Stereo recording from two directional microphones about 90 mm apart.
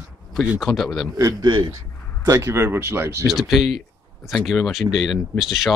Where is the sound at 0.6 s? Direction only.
Centre (ahead or behind).